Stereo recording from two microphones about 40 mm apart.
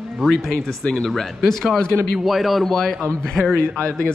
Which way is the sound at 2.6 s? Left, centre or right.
Centre.